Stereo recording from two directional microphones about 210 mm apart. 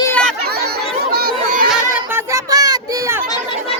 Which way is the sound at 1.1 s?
45° right (ahead or behind).